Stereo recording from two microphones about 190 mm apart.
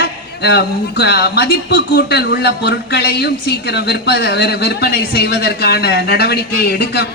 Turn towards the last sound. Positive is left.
turn(degrees=55)  # may be behind; listen again after turning